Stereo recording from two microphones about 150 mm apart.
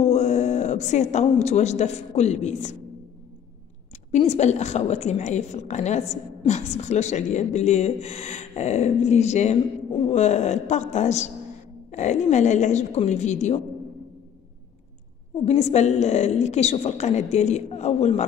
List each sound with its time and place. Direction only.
0.0 s a woman's voice: 50° left (ahead or behind)
4.2 s a woman's voice: 45° left (ahead or behind)
15.4 s a woman's voice: 45° left (ahead or behind)